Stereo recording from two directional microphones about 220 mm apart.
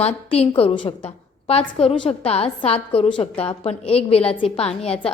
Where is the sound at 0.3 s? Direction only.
25° left (ahead or behind).